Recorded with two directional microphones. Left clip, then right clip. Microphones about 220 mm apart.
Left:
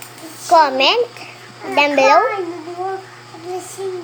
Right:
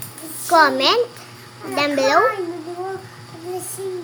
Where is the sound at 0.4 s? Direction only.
20° right (ahead or behind).